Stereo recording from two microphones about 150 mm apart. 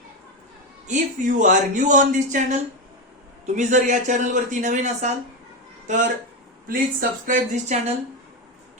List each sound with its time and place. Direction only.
0.9 s speech: 55° right (ahead or behind)
6.7 s speech: 65° right (ahead or behind)